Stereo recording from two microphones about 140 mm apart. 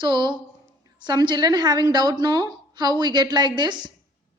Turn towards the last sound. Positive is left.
turn(degrees=-30)  # may be behind; listen again after turning